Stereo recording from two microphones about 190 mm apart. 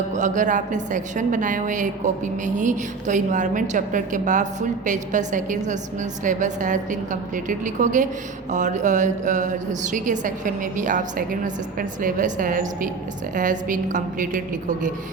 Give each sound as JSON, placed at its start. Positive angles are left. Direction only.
{"t": 0.1, "sound": "a woman's voice", "side_deg": -40}